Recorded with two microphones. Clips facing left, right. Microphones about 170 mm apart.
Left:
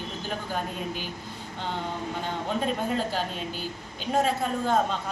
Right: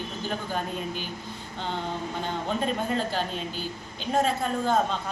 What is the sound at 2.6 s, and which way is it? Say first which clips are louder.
A woman's voice: left 1 dB; 5° left (ahead or behind).